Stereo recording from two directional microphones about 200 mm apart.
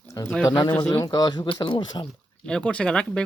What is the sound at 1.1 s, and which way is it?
Speech, 20° left (ahead or behind).